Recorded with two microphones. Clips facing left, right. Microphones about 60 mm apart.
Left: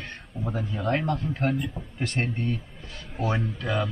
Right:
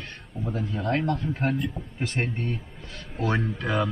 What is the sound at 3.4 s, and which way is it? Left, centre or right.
Speech, right.